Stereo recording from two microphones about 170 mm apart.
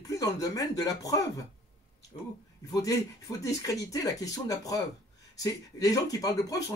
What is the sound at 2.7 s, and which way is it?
Speech, 20° left (ahead or behind).